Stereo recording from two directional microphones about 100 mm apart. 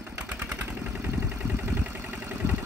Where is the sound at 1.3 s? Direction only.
10° right (ahead or behind).